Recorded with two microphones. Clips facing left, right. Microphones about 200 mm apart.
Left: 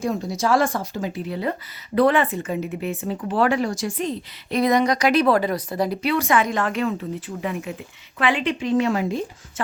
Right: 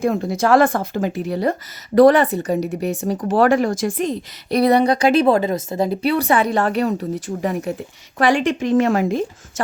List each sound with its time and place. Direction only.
0.0 s a woman's voice: 55° right (ahead or behind)